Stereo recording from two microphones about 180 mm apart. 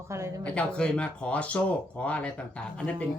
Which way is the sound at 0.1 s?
15° right (ahead or behind).